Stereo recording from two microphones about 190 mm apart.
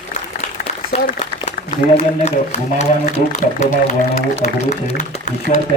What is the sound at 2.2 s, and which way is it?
Speech, 35° left (ahead or behind).